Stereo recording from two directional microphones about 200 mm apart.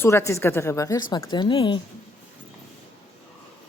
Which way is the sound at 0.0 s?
15° left (ahead or behind).